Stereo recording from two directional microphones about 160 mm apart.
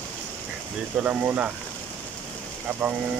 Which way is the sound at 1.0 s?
10° right (ahead or behind).